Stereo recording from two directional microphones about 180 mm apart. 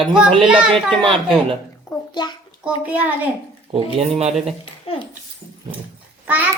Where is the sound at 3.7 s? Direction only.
35° right (ahead or behind).